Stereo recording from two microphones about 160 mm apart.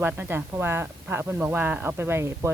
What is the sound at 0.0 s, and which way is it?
Speech, 10° right (ahead or behind).